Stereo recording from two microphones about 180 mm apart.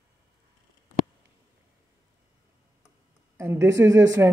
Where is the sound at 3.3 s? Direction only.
15° right (ahead or behind).